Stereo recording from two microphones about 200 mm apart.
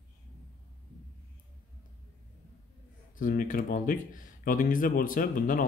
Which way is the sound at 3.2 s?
40° left (ahead or behind).